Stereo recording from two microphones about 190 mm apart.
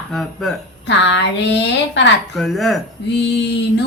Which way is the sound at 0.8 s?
65° left (ahead or behind).